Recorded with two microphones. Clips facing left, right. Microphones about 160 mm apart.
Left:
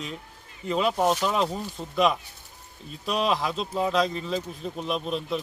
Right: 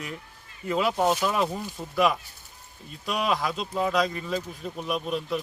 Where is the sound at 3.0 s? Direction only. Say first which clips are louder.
Left 1 dB; centre (ahead or behind).